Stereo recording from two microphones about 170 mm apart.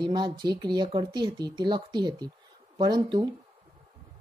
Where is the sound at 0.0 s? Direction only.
25° right (ahead or behind).